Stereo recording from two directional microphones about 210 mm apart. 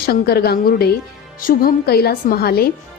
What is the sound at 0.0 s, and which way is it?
A woman's voice, 45° left (ahead or behind).